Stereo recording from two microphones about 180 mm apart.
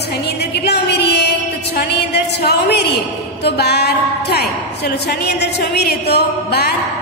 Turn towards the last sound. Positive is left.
turn(degrees=65)  # may be behind; listen again after turning